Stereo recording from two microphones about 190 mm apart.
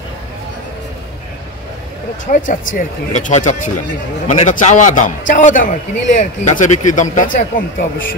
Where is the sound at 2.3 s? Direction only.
45° left (ahead or behind).